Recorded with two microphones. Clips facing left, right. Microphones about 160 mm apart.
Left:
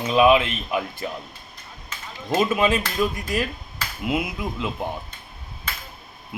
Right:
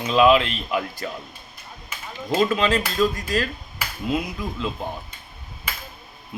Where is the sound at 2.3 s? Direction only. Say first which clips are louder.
Even; 20° left (ahead or behind).